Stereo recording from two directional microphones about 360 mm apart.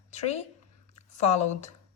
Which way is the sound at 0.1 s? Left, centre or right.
Centre.